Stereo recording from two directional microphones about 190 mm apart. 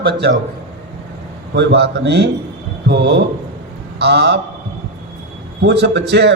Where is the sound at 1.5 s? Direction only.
65° right (ahead or behind).